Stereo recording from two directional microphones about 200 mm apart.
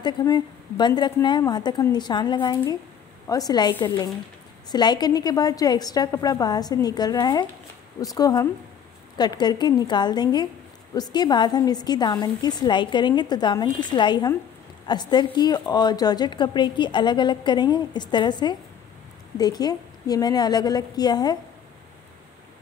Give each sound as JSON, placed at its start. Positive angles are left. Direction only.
{"t": 0.0, "sound": "a woman's voice", "side_deg": 20}